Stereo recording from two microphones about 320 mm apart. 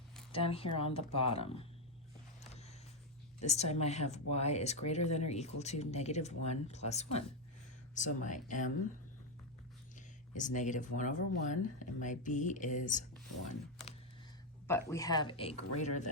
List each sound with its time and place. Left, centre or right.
0.3 s speech: centre
2.5 s a sound: centre
3.4 s speech: left
10.3 s speech: left
14.7 s speech: centre